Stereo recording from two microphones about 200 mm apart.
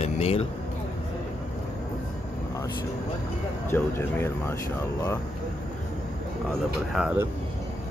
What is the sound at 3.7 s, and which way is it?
Speech, 10° left (ahead or behind).